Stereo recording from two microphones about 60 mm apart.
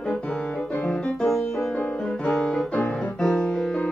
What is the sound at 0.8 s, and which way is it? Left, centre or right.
Music, centre.